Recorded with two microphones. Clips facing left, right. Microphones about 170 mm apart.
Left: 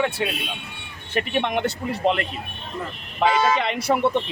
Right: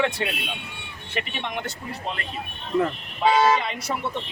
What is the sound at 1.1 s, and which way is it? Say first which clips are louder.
A man's voice: left 7 dB; 55° left (ahead or behind).